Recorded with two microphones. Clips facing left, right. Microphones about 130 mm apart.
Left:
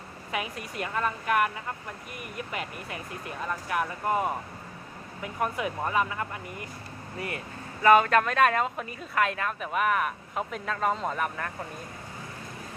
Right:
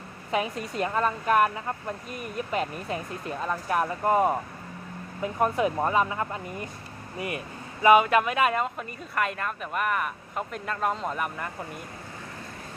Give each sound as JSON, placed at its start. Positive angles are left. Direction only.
{"t": 0.3, "sound": "speech", "side_deg": -30}
{"t": 2.5, "sound": "speech", "side_deg": -30}